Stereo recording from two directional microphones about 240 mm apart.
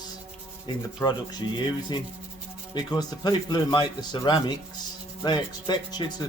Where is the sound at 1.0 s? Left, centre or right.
Centre.